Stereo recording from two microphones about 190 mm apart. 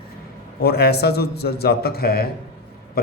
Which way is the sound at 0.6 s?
55° left (ahead or behind).